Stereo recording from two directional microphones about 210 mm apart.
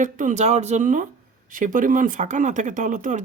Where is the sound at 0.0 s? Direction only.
40° right (ahead or behind).